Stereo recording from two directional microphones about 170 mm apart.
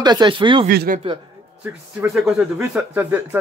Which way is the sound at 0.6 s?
60° right (ahead or behind).